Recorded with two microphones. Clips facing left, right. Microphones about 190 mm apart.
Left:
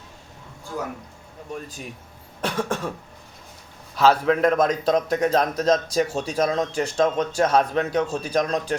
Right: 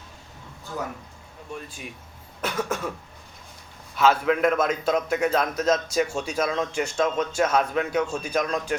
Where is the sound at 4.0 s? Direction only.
35° left (ahead or behind).